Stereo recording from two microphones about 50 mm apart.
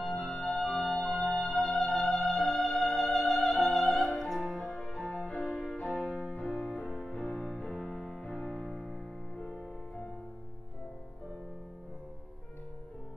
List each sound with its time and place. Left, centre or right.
0.2 s organ: centre
0.8 s music: centre
5.1 s music: centre
5.9 s music: centre